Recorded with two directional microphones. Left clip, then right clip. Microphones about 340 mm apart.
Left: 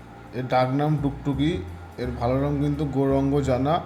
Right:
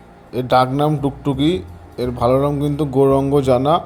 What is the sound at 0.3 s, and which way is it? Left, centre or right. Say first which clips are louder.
A man's voice: right 7 dB; centre.